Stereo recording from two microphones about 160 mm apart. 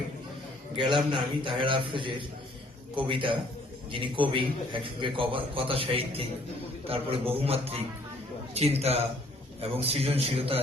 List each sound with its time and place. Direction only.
0.8 s a man's voice: 30° right (ahead or behind)